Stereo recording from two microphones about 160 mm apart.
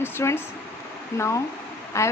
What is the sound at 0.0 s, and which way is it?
Speech, 15° left (ahead or behind).